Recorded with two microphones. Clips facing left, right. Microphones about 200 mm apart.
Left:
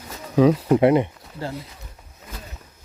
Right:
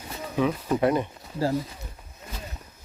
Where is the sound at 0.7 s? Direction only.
20° left (ahead or behind).